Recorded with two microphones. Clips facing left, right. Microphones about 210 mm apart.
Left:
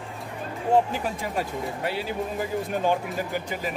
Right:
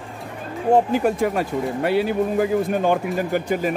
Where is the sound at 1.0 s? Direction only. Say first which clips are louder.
Right 9 dB; 60° right (ahead or behind).